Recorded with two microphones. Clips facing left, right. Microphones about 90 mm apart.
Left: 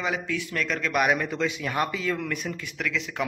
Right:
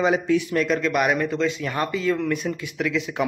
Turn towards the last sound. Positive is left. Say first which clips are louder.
# right 5 dB
turn(degrees=-10)  # may be behind; listen again after turning